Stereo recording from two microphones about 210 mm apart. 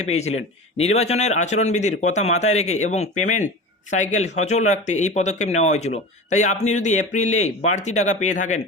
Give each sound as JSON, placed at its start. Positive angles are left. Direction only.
{"t": 0.1, "sound": "a man's voice", "side_deg": 30}